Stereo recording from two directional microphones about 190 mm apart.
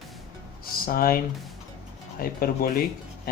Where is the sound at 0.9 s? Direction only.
50° left (ahead or behind).